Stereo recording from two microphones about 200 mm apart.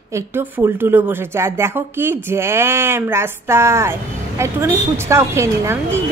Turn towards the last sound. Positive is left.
turn(degrees=-15)  # may be behind; listen again after turning